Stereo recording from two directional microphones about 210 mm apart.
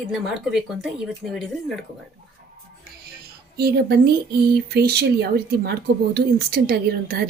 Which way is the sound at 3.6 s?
50° right (ahead or behind).